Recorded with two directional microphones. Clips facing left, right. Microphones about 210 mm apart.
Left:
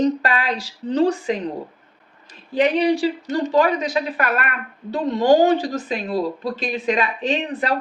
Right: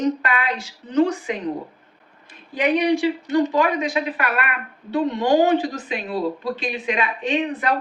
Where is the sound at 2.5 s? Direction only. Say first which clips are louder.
Left 2 dB; 35° left (ahead or behind).